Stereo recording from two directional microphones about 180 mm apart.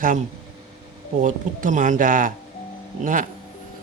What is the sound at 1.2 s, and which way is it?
Speech, 45° right (ahead or behind).